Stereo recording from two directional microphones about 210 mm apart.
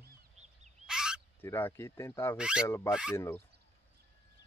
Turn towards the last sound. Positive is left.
turn(degrees=10)  # may be behind; listen again after turning